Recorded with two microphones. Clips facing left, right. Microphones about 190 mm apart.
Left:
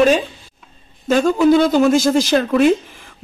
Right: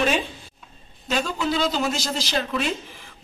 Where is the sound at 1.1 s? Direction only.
50° left (ahead or behind).